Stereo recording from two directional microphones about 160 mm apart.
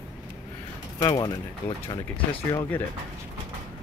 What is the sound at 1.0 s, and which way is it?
Speech, 25° left (ahead or behind).